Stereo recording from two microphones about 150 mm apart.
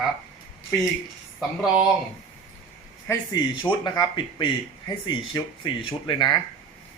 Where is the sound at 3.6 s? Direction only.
30° left (ahead or behind).